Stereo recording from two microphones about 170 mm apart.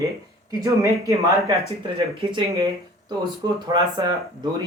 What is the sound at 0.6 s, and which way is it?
Speech, 20° right (ahead or behind).